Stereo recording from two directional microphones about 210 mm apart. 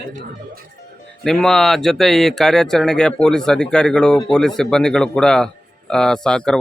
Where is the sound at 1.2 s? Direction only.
Centre (ahead or behind).